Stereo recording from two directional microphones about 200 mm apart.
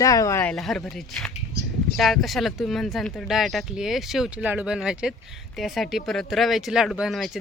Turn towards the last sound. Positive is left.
turn(degrees=0)  # may be behind; listen again after turning